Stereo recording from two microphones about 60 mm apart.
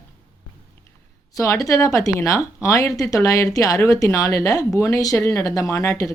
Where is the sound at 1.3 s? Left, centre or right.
Left.